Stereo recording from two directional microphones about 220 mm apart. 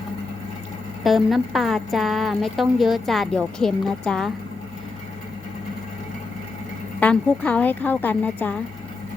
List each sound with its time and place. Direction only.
1.0 s a woman's voice: centre (ahead or behind)
7.0 s a woman's voice: 5° left (ahead or behind)